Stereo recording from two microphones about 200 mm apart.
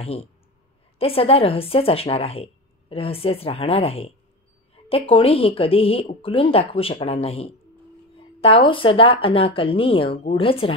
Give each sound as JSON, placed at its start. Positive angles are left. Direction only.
{"t": 0.0, "sound": "speech", "side_deg": 30}